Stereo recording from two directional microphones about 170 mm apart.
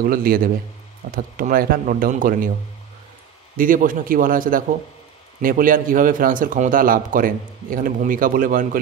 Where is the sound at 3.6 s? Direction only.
55° right (ahead or behind).